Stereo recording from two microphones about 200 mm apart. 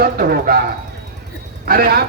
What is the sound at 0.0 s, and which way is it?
Speech, 50° right (ahead or behind).